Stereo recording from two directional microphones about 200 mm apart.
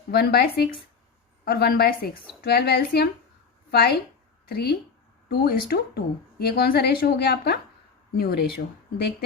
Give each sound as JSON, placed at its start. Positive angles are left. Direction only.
{"t": 0.1, "sound": "a woman's voice", "side_deg": 55}